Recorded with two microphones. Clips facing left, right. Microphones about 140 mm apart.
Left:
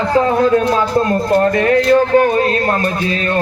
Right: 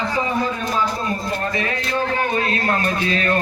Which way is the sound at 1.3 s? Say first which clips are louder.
Left 12 dB; 55° left (ahead or behind).